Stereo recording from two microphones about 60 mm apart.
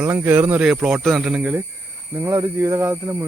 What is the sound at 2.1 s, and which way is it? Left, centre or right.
Speech, right.